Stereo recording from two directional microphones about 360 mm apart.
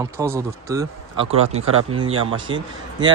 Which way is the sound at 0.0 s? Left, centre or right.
Centre.